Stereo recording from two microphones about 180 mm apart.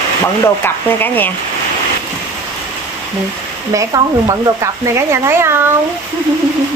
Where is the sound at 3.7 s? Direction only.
20° right (ahead or behind).